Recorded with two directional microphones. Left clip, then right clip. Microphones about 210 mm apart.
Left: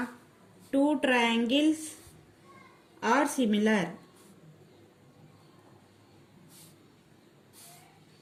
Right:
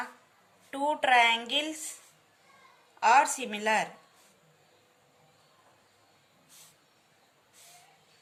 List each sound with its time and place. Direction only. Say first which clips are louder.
0.7 s speech: right 1 dB; 40° right (ahead or behind)
3.0 s speech: right 4 dB; 40° right (ahead or behind)